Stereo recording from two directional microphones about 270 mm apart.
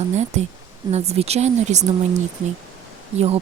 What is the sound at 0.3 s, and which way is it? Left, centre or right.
Speech, right.